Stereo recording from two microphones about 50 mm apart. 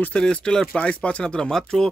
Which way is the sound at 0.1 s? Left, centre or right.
Centre.